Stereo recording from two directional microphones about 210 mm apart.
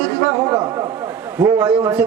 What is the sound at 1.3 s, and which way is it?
Speech, 5° right (ahead or behind).